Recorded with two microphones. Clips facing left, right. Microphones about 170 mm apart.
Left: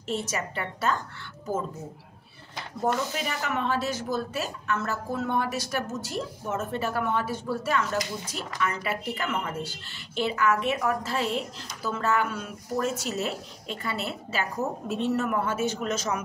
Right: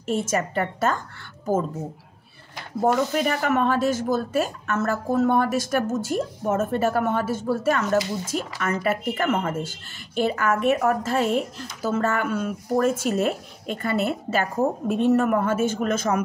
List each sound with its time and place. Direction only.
0.0 s speech: 50° right (ahead or behind)
2.8 s speech: 50° right (ahead or behind)